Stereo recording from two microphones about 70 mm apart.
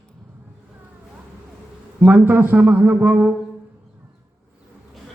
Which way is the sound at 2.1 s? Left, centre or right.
Right.